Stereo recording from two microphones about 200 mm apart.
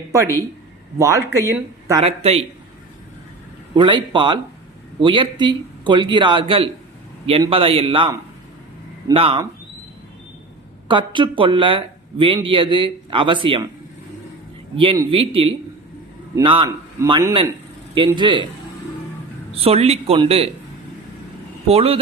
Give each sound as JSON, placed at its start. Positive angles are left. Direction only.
{"t": 0.9, "sound": "speech", "side_deg": -15}
{"t": 2.0, "sound": "a man's voice", "side_deg": -30}
{"t": 3.8, "sound": "a man's voice", "side_deg": -25}
{"t": 10.8, "sound": "a man's voice", "side_deg": -25}
{"t": 14.8, "sound": "a man's voice", "side_deg": -25}
{"t": 19.5, "sound": "a man's voice", "side_deg": -30}
{"t": 21.7, "sound": "a man's voice", "side_deg": -30}